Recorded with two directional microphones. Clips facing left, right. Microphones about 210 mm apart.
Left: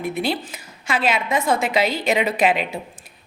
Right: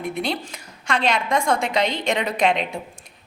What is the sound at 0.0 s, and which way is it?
A woman's voice, 5° left (ahead or behind).